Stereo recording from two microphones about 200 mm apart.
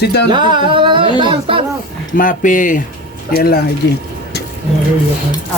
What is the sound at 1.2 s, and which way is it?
Speech, 25° right (ahead or behind).